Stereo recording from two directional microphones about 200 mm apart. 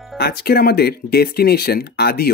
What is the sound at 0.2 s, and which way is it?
A man's voice, 50° left (ahead or behind).